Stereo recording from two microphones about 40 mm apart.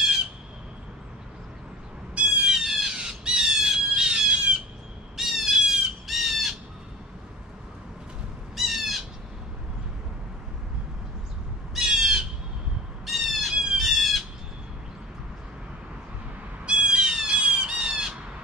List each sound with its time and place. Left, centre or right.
2.4 s squawk: centre
5.1 s squawk: centre
6.0 s bird: centre
8.5 s bird: centre
11.8 s bird: centre
13.0 s squawk: centre
13.5 s a sound: centre
13.7 s squawk: centre
16.6 s cat: right
17.4 s squawk: right